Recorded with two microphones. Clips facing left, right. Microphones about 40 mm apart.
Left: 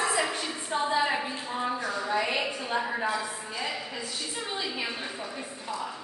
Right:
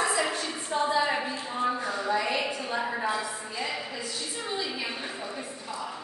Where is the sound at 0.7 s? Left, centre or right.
Centre.